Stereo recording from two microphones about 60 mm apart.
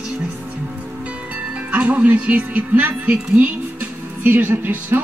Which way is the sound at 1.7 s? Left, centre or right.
Right.